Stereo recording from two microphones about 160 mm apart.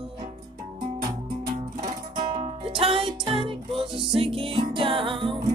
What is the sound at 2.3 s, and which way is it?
Music, 35° right (ahead or behind).